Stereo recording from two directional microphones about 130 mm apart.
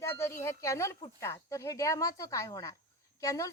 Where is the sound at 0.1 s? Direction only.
20° left (ahead or behind).